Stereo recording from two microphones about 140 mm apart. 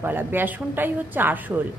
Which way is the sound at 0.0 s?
15° right (ahead or behind).